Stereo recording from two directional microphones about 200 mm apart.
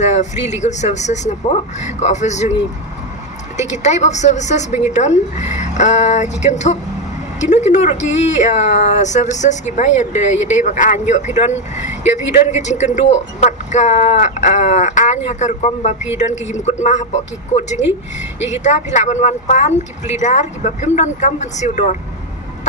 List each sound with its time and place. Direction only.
0.0 s speech: 35° left (ahead or behind)
3.6 s speech: 35° left (ahead or behind)